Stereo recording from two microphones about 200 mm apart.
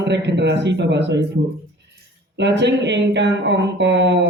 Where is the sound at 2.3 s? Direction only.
60° right (ahead or behind).